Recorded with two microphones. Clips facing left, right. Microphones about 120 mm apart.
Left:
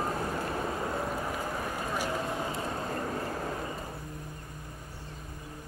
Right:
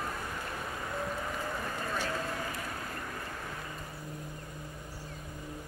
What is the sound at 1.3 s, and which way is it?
Vehicle, 10° left (ahead or behind).